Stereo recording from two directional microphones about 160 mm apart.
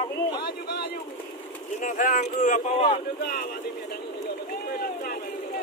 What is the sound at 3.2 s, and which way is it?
Speech, 75° left (ahead or behind).